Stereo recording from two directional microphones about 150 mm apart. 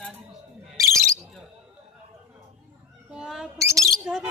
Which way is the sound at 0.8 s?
20° right (ahead or behind).